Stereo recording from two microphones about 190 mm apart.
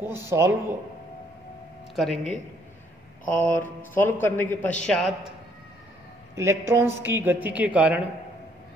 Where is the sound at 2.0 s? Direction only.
Centre (ahead or behind).